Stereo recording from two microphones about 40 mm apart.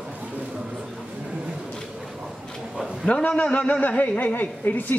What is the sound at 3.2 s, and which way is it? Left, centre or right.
A man's voice, left.